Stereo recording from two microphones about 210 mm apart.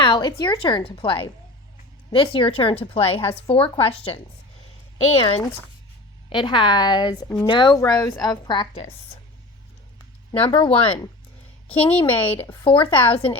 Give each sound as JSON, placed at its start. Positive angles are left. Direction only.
{"t": 0.0, "sound": "speech", "side_deg": 20}
{"t": 5.2, "sound": "speech", "side_deg": 25}
{"t": 10.3, "sound": "speech", "side_deg": 25}
{"t": 12.0, "sound": "speech", "side_deg": 10}
{"t": 12.6, "sound": "speech", "side_deg": 25}